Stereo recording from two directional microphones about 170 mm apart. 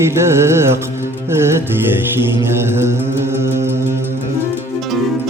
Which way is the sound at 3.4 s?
15° right (ahead or behind).